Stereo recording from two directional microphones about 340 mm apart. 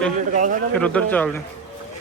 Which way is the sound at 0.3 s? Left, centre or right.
Right.